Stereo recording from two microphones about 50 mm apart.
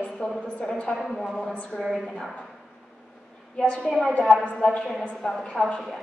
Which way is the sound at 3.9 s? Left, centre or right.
Centre.